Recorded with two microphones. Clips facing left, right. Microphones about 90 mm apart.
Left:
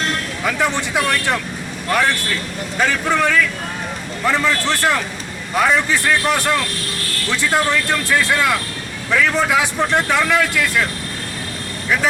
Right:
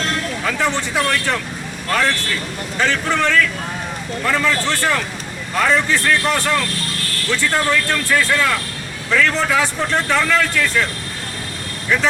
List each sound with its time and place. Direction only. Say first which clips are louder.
0.4 s speech: left 2 dB; 15° left (ahead or behind)